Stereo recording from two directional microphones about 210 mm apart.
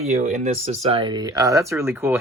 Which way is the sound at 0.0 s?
30° right (ahead or behind).